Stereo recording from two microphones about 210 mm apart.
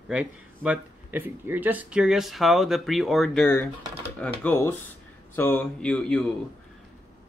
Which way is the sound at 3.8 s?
25° right (ahead or behind).